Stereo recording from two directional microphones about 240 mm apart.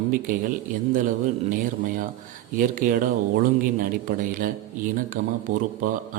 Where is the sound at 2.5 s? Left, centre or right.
Right.